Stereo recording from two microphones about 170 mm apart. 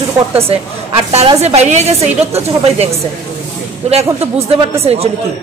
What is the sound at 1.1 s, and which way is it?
A woman's voice, 40° right (ahead or behind).